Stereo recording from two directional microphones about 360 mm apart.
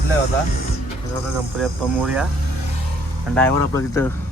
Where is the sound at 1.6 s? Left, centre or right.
Centre.